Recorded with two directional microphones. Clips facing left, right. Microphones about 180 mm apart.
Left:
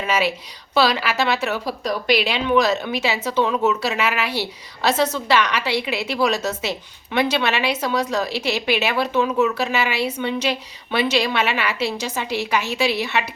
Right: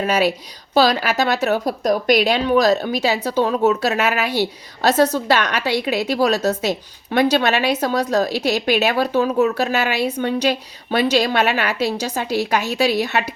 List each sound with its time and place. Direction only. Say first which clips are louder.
0.0 s a woman's voice: right 4 dB; 40° right (ahead or behind)